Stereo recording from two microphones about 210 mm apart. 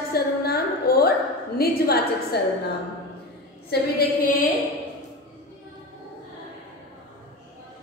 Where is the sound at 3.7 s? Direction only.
50° left (ahead or behind).